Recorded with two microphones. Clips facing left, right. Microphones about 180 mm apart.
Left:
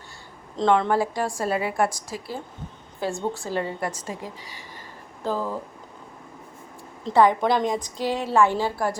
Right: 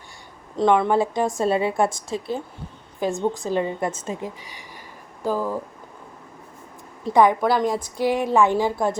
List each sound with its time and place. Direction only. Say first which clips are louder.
0.5 s a woman's voice: right 2 dB; 10° right (ahead or behind)
7.0 s a woman's voice: right 1 dB; 15° right (ahead or behind)